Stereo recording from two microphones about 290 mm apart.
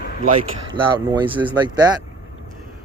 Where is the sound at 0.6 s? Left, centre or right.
Centre.